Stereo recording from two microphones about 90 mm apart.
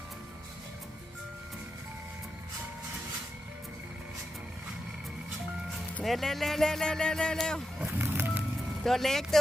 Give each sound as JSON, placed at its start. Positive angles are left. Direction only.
{"t": 6.0, "sound": "speech", "side_deg": 5}
{"t": 7.9, "sound": "music", "side_deg": -25}
{"t": 8.8, "sound": "speech", "side_deg": 5}